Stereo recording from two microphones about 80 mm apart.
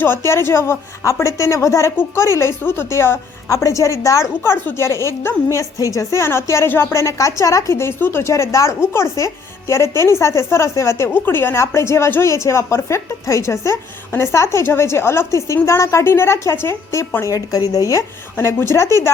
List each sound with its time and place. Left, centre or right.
0.0 s a woman's voice: left
4.5 s a woman's voice: left
4.9 s a woman's voice: left
17.2 s a woman's voice: left